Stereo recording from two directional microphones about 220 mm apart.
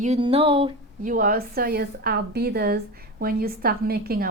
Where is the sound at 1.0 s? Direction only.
40° right (ahead or behind).